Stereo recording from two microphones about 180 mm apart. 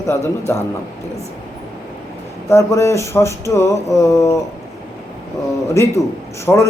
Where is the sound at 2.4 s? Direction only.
15° left (ahead or behind).